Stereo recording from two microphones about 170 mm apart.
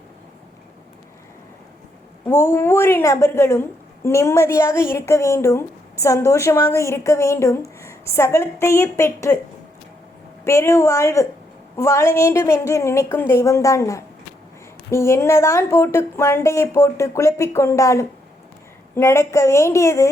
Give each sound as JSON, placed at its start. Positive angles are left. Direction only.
{"t": 2.2, "sound": "a woman's voice", "side_deg": 15}
{"t": 10.4, "sound": "a woman's voice", "side_deg": 15}